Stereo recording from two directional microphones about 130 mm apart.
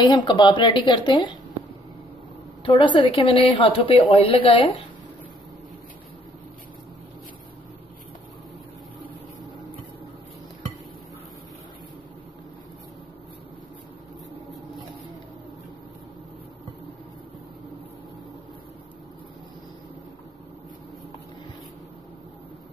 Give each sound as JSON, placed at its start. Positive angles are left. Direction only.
{"t": 0.0, "sound": "speech", "side_deg": 35}
{"t": 2.6, "sound": "a woman's voice", "side_deg": 40}